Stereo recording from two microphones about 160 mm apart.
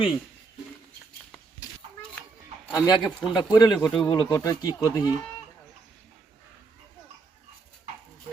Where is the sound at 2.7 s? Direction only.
25° left (ahead or behind).